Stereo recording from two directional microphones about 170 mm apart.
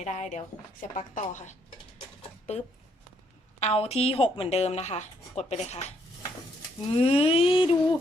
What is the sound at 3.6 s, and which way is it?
A woman's voice, 40° left (ahead or behind).